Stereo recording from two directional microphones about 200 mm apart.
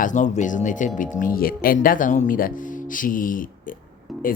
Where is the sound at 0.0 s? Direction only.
40° left (ahead or behind).